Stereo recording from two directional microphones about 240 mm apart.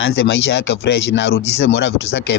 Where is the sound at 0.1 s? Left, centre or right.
Left.